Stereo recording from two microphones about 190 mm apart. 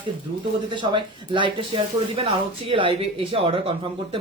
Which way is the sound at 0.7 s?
25° right (ahead or behind).